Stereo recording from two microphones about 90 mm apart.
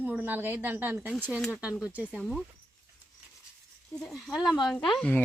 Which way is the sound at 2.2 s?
Centre (ahead or behind).